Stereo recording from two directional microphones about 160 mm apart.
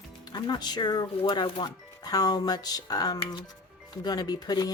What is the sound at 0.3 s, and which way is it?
Speech, 25° left (ahead or behind).